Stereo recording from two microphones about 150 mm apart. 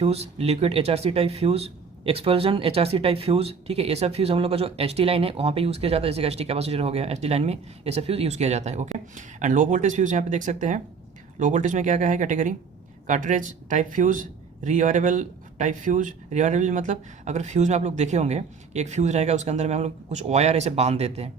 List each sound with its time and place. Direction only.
0.0 s speech: 45° right (ahead or behind)